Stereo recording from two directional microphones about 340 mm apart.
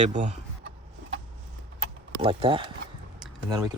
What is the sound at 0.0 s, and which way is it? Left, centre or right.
Speech, right.